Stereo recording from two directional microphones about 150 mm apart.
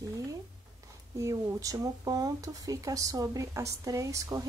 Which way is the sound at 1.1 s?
20° right (ahead or behind).